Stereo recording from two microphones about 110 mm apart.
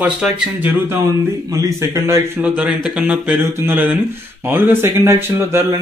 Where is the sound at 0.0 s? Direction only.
15° right (ahead or behind).